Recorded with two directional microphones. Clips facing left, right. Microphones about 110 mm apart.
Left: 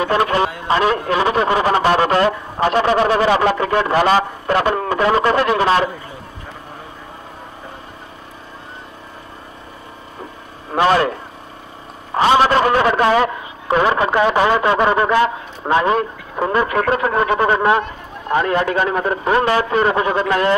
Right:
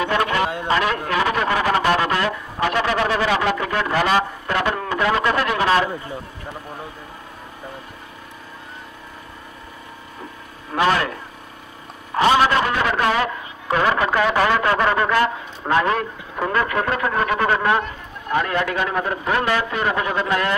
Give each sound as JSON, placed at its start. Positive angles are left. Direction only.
{"t": 0.0, "sound": "a man's voice", "side_deg": 30}
{"t": 10.7, "sound": "a man's voice", "side_deg": 30}